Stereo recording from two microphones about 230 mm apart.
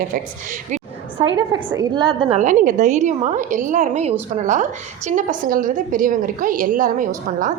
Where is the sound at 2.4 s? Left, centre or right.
Right.